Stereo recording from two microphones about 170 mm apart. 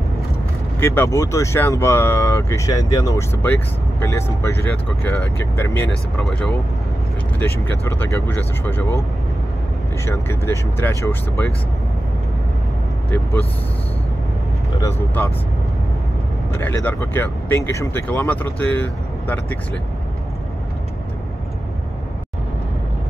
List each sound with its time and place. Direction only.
0.7 s speech: 15° left (ahead or behind)
10.0 s speech: 15° left (ahead or behind)
14.8 s speech: 15° left (ahead or behind)
16.5 s speech: 10° left (ahead or behind)